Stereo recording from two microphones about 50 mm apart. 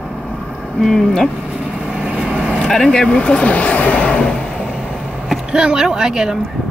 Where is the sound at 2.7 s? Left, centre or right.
Centre.